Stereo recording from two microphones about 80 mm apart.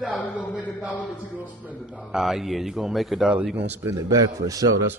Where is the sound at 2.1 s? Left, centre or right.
Centre; by 3.9 s right.